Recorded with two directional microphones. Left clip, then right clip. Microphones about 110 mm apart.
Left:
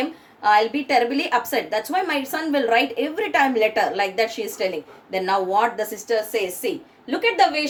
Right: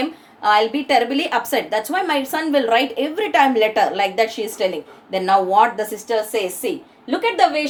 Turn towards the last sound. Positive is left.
turn(degrees=-25)  # may be behind; listen again after turning